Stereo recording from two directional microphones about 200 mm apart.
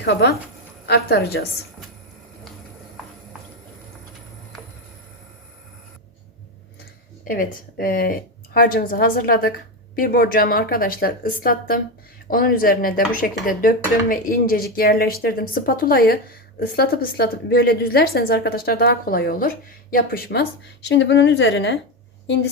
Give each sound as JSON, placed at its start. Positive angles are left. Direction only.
{"t": 0.0, "sound": "a woman's voice", "side_deg": 55}
{"t": 7.3, "sound": "a woman's voice", "side_deg": 45}